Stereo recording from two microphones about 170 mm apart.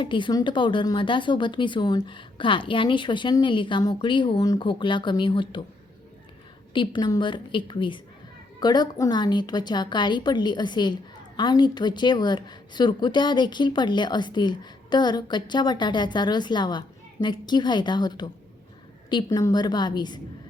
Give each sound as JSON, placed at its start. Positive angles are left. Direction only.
{"t": 0.0, "sound": "a woman's voice", "side_deg": 30}
{"t": 6.7, "sound": "a woman's voice", "side_deg": 25}